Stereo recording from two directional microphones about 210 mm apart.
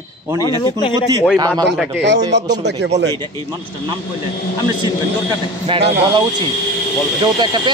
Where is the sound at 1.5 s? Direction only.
Centre (ahead or behind).